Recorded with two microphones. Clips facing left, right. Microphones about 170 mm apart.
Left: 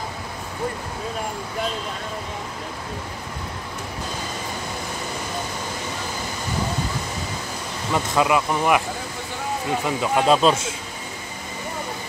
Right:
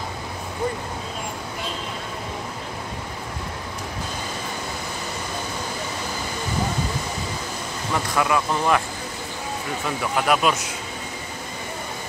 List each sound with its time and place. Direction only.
7.9 s speech: 20° left (ahead or behind)
9.8 s speech: 20° left (ahead or behind)